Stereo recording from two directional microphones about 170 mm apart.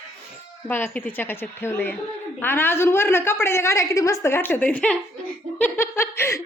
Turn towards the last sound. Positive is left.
turn(degrees=15)  # may be behind; listen again after turning